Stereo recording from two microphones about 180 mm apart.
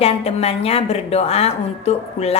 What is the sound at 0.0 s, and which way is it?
Speech, 35° left (ahead or behind).